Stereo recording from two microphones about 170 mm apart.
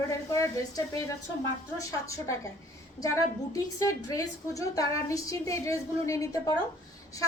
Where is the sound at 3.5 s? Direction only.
20° left (ahead or behind).